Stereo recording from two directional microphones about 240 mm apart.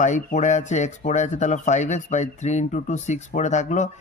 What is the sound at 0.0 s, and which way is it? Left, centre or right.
Speech, left.